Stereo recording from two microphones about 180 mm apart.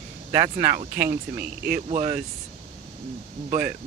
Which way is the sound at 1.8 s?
40° right (ahead or behind).